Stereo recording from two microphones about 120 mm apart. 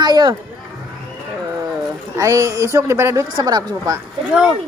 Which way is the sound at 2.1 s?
25° right (ahead or behind).